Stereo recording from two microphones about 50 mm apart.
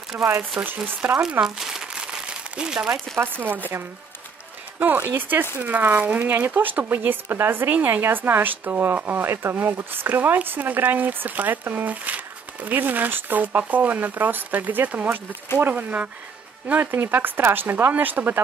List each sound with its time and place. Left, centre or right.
0.1 s speech: right
1.4 s speech: centre
1.9 s a sound: centre
3.3 s speech: right
4.7 s speech: right
6.2 s speech: right
9.2 s speech: right
16.7 s speech: right